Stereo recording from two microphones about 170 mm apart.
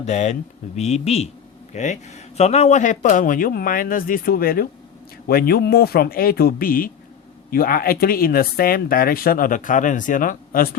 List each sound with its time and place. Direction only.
0.0 s speech: 40° left (ahead or behind); by 10.8 s 60° left (ahead or behind)